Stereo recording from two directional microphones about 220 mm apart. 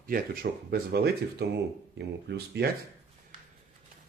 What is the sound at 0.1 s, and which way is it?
Speech, 45° right (ahead or behind).